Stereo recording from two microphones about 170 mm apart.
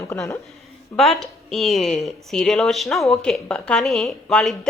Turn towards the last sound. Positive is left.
turn(degrees=5)  # may be behind; listen again after turning